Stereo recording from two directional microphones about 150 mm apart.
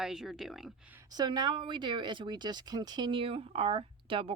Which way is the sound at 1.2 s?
30° right (ahead or behind).